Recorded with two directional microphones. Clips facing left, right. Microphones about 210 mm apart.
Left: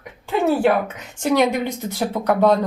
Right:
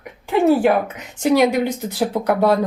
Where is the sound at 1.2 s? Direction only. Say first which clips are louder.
Right 3 dB; 10° right (ahead or behind).